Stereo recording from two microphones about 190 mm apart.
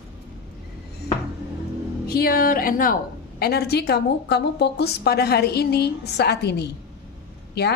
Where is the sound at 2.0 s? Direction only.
55° left (ahead or behind).